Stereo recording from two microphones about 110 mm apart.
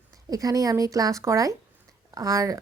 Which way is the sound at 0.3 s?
30° right (ahead or behind).